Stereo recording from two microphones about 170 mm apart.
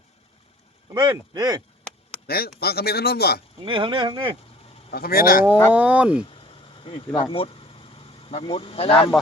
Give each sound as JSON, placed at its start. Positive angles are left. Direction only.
{"t": 0.9, "sound": "speech", "side_deg": -25}
{"t": 2.2, "sound": "speech", "side_deg": 65}
{"t": 3.6, "sound": "speech", "side_deg": -30}
{"t": 4.9, "sound": "speech", "side_deg": 60}
{"t": 5.7, "sound": "speech", "side_deg": -10}
{"t": 6.8, "sound": "speech", "side_deg": 35}